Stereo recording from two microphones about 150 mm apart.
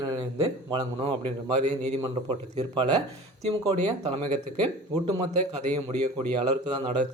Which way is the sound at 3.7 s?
50° right (ahead or behind).